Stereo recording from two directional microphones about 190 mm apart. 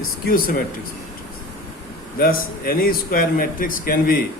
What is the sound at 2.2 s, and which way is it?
Speech, 50° left (ahead or behind).